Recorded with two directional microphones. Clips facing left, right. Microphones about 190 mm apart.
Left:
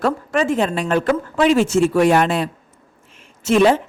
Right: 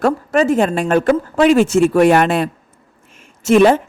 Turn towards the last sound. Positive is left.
turn(degrees=-55)  # may be behind; listen again after turning